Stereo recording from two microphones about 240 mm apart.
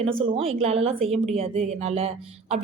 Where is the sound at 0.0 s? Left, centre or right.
Right.